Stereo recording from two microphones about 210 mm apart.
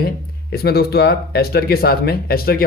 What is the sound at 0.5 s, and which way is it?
Speech, 50° left (ahead or behind).